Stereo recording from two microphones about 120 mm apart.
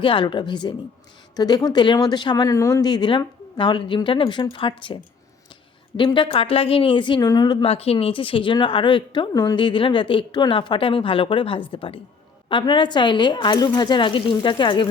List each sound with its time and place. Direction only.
0.0 s a woman's voice: 45° left (ahead or behind)
6.1 s a woman's voice: 45° left (ahead or behind)
7.6 s a woman's voice: 55° left (ahead or behind)